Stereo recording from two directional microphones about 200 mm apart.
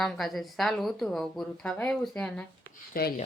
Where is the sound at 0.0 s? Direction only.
Centre (ahead or behind).